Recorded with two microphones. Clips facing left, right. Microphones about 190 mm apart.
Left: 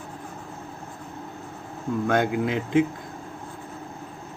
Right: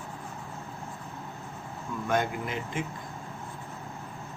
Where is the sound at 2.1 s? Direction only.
90° left.